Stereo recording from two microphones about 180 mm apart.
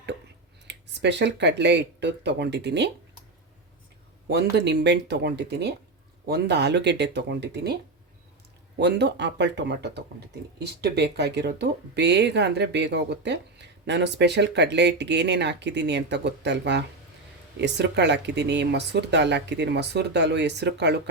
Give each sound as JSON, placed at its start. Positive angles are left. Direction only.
{"t": 0.7, "sound": "speech", "side_deg": -75}
{"t": 4.3, "sound": "speech", "side_deg": -65}
{"t": 8.8, "sound": "speech", "side_deg": -70}